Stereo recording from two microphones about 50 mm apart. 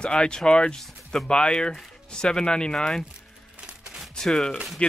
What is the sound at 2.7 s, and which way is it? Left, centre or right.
Speech, centre.